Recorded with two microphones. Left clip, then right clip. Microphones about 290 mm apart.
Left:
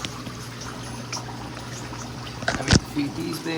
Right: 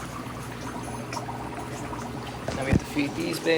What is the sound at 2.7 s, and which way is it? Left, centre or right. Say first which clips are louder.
Rowboat: left 5 dB; right.